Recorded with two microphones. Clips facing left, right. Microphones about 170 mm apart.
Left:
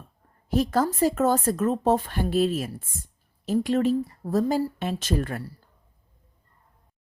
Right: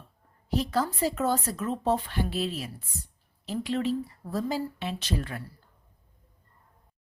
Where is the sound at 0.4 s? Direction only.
50° left (ahead or behind).